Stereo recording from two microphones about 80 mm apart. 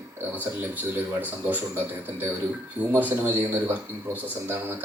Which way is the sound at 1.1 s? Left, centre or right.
Right.